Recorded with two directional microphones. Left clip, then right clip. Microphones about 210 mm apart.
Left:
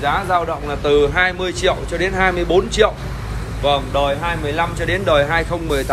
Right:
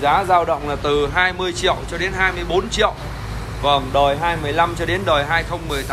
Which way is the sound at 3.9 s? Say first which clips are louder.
Right 2 dB; 25° right (ahead or behind).